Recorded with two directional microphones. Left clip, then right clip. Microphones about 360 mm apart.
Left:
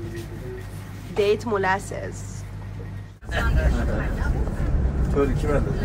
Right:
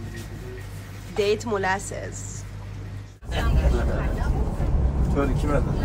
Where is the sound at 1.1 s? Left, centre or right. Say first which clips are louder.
Left 2 dB; centre.